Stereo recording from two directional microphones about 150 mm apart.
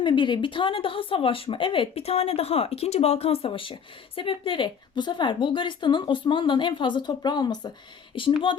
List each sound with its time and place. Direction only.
0.0 s speech: 35° left (ahead or behind)